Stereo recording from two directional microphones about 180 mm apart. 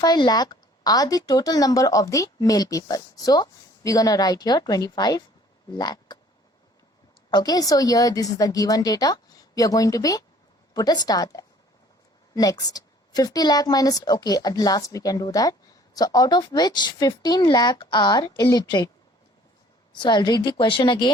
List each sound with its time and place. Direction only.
0.0 s a woman's voice: 20° left (ahead or behind)
7.3 s a woman's voice: 25° left (ahead or behind)
20.0 s a woman's voice: 25° left (ahead or behind)